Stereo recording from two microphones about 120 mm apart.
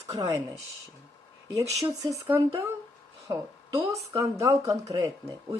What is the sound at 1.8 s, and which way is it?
Speech, 25° right (ahead or behind).